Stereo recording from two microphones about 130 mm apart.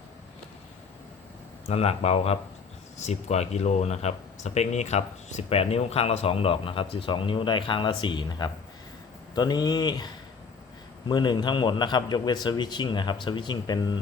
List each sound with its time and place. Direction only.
1.6 s a man's voice: 50° left (ahead or behind); by 10.1 s 30° left (ahead or behind)
11.1 s a man's voice: 35° left (ahead or behind)